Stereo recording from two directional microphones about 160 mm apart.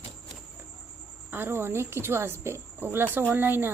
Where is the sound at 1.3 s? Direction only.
15° right (ahead or behind).